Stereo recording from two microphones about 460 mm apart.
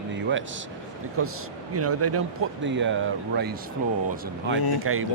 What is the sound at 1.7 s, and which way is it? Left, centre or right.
A man's voice, right.